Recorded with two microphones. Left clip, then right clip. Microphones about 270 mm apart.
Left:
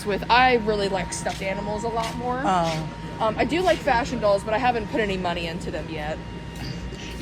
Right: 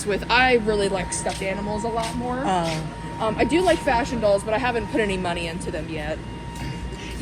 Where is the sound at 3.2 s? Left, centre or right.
Left.